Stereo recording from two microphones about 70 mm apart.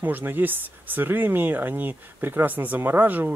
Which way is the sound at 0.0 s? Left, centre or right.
Right.